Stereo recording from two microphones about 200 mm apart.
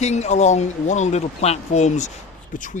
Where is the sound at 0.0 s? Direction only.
35° left (ahead or behind).